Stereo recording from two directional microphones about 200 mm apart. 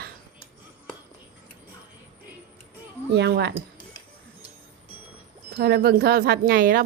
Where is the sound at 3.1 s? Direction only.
55° right (ahead or behind).